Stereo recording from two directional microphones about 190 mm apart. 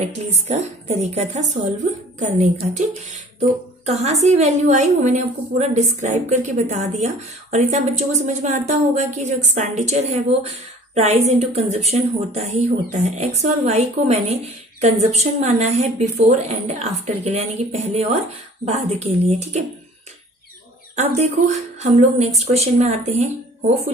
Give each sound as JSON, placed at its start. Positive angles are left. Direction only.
{"t": 0.0, "sound": "a woman's voice", "side_deg": -35}
{"t": 20.9, "sound": "a woman's voice", "side_deg": -35}